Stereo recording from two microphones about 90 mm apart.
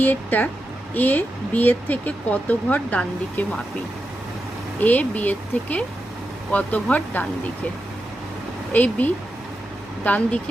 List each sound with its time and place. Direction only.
0.0 s speech: 20° left (ahead or behind)
4.8 s speech: 20° left (ahead or behind)
8.7 s speech: 20° left (ahead or behind)